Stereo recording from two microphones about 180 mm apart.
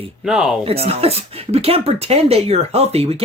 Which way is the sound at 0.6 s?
35° right (ahead or behind).